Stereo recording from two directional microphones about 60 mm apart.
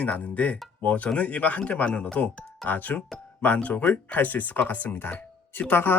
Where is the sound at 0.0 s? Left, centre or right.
Left.